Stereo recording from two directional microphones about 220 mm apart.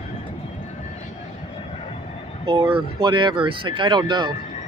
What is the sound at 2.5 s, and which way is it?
Speech, 25° right (ahead or behind).